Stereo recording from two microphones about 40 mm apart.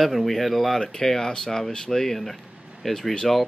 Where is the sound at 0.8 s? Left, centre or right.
Centre.